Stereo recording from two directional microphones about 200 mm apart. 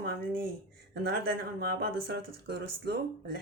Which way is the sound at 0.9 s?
50° right (ahead or behind).